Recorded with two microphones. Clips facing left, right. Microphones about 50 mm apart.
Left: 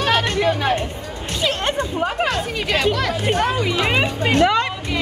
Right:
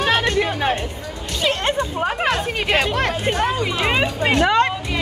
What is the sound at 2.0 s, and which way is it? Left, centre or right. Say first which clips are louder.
Speech: right 1 dB; right.